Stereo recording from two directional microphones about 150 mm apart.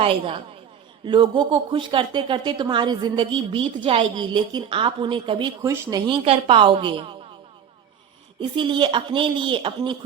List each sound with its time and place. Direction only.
0.0 s a woman's voice: 35° right (ahead or behind)
5.6 s speech: 20° right (ahead or behind)
6.1 s a woman's voice: 35° right (ahead or behind)
8.4 s a woman's voice: 30° right (ahead or behind)